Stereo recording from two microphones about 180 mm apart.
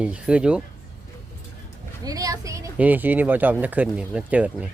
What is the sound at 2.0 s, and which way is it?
A woman's voice, 20° right (ahead or behind).